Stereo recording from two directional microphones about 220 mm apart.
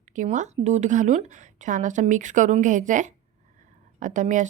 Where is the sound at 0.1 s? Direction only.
35° right (ahead or behind).